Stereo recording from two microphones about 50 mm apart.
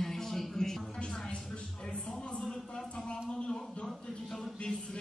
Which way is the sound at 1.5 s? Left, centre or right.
Centre.